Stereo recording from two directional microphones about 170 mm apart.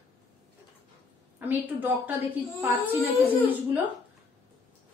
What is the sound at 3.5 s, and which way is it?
Speech, 10° right (ahead or behind).